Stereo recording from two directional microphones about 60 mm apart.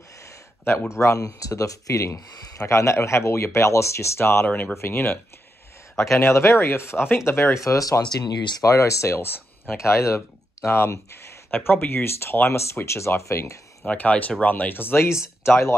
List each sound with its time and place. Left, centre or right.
0.7 s speech: left
6.0 s speech: left
13.8 s speech: left